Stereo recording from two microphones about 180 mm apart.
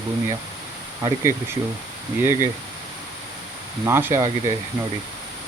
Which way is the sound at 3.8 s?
15° right (ahead or behind).